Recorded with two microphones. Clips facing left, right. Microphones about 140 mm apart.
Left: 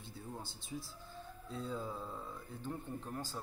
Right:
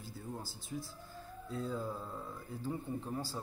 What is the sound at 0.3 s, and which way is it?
A man's voice, centre (ahead or behind).